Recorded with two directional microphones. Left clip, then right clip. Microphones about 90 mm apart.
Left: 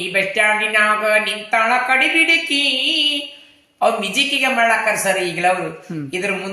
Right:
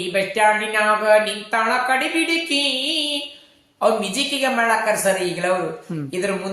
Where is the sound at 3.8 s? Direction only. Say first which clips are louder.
Left 2 dB; 35° right (ahead or behind).